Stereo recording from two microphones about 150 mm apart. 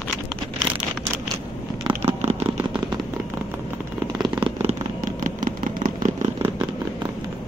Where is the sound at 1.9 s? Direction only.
45° right (ahead or behind).